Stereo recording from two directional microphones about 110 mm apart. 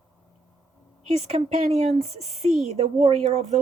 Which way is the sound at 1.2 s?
80° right.